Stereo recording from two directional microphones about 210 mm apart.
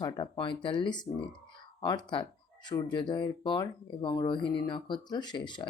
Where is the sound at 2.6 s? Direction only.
20° left (ahead or behind).